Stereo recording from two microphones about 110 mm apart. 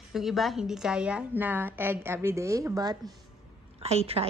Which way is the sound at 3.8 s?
65° right (ahead or behind).